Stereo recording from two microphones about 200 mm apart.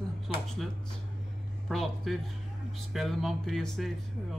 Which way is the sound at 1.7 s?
Centre (ahead or behind).